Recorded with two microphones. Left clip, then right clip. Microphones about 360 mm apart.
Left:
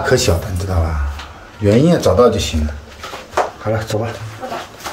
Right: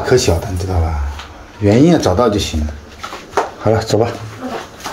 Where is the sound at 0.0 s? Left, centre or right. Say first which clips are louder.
Right 1 dB; centre.